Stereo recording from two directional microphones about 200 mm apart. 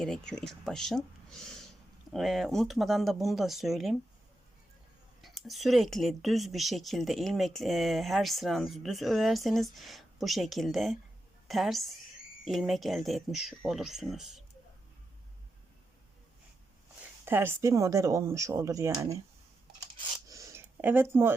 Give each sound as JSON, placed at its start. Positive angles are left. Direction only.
{"t": 0.0, "sound": "speech", "side_deg": 5}
{"t": 5.2, "sound": "a woman's voice", "side_deg": 0}
{"t": 17.2, "sound": "speech", "side_deg": -10}
{"t": 20.2, "sound": "a sound", "side_deg": -15}